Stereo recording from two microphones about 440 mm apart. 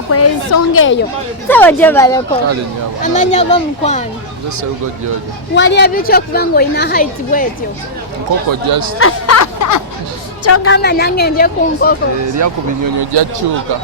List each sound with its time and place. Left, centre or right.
0.1 s a woman's voice: left
1.5 s speech: centre
5.5 s a woman's voice: left
8.6 s speech: right
9.0 s music: left
10.4 s a woman's voice: left
12.4 s speech: right